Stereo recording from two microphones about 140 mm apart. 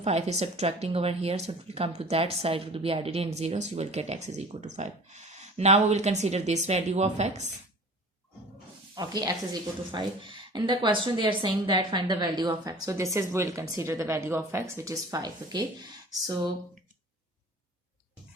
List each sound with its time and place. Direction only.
0.0 s speech: 50° right (ahead or behind)
9.0 s a woman's voice: 30° right (ahead or behind)